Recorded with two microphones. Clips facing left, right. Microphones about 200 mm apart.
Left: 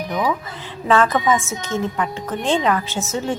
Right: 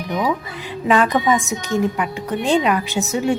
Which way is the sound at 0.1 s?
15° right (ahead or behind).